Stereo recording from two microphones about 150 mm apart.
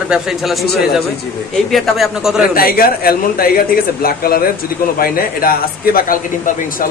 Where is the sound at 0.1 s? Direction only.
Centre (ahead or behind).